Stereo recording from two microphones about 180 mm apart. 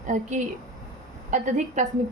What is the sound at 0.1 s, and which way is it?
A woman's voice, 40° right (ahead or behind).